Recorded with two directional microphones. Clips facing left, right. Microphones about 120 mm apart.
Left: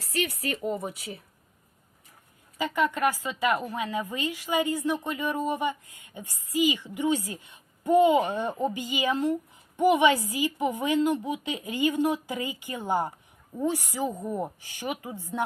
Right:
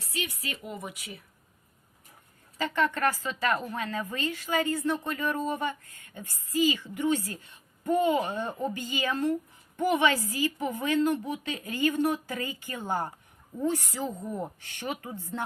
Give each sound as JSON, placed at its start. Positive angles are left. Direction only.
{"t": 0.4, "sound": "speech", "side_deg": 40}
{"t": 2.6, "sound": "a woman's voice", "side_deg": 15}